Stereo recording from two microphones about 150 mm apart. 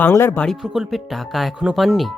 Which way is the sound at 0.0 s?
15° left (ahead or behind).